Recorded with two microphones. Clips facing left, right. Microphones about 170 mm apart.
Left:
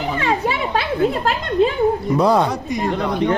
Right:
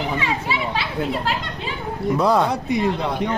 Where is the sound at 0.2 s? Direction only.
50° left (ahead or behind).